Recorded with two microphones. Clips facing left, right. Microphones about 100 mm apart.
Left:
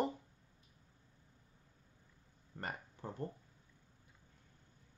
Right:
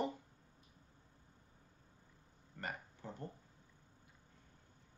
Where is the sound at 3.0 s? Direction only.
50° left (ahead or behind).